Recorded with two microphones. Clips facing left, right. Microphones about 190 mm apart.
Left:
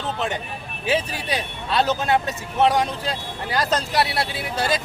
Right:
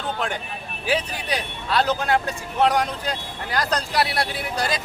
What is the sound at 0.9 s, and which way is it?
Speech, 25° left (ahead or behind).